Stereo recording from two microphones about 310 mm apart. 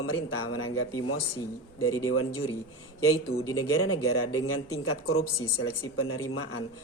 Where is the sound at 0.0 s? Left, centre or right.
Left.